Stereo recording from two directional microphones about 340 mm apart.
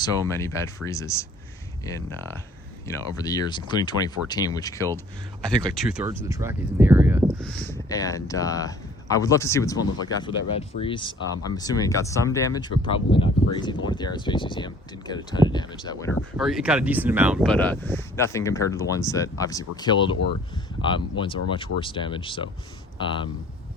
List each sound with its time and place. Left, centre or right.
0.3 s speech: centre
2.8 s speech: centre
7.6 s speech: centre